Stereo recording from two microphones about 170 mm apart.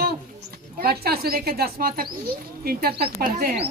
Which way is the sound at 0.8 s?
65° right (ahead or behind).